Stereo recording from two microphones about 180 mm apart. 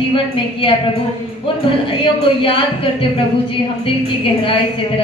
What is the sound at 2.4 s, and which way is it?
Speech, 30° left (ahead or behind).